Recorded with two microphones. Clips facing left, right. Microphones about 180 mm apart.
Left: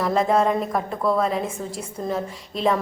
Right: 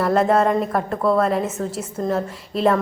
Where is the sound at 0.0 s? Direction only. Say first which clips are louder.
Right 3 dB; centre (ahead or behind).